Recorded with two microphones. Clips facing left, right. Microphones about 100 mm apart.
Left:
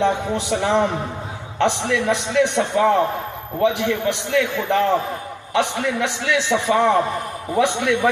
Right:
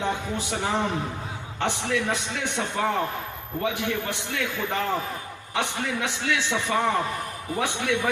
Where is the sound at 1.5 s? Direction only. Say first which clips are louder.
Left 7 dB; 90° left.